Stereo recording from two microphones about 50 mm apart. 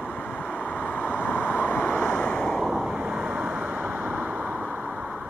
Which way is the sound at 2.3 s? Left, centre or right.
Centre.